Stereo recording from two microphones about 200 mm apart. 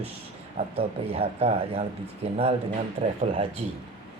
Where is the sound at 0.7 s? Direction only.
30° right (ahead or behind).